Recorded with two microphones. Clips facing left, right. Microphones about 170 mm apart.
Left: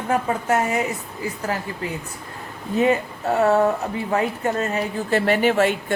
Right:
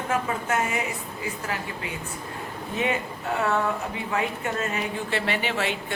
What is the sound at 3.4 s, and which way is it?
A woman's voice, 40° left (ahead or behind).